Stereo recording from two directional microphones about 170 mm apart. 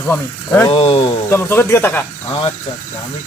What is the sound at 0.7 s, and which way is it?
Speech, 35° left (ahead or behind).